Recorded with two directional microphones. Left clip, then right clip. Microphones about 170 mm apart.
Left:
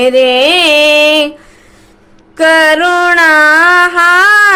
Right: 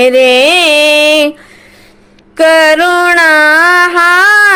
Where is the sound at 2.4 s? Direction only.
25° right (ahead or behind).